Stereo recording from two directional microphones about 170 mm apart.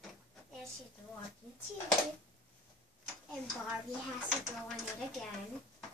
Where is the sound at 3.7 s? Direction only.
Centre (ahead or behind).